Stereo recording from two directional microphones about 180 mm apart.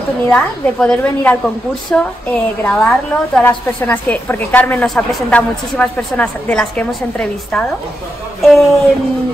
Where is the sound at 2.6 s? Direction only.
5° left (ahead or behind).